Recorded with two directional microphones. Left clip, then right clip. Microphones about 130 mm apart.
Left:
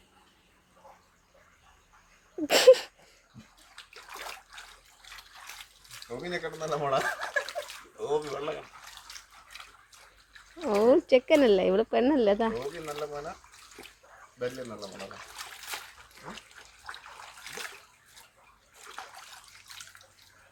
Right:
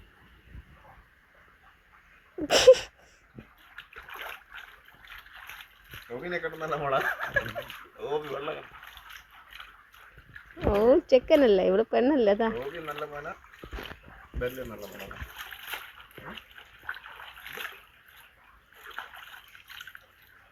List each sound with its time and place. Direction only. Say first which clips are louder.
2.5 s a sound: right 1 dB; 10° left (ahead or behind)
3.9 s splash: right 1 dB; 25° left (ahead or behind)
5.0 s water: right 1 dB; 30° left (ahead or behind)
5.9 s speech: right 1 dB; 30° left (ahead or behind)
10.8 s speech: right 1 dB; centre (ahead or behind)
12.5 s speech: even; 25° left (ahead or behind)
14.9 s splash: right 1 dB; 25° left (ahead or behind)
17.4 s bathtub: right 2 dB; 20° left (ahead or behind)